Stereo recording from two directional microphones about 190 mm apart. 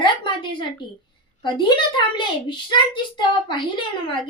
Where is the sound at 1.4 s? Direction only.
25° left (ahead or behind).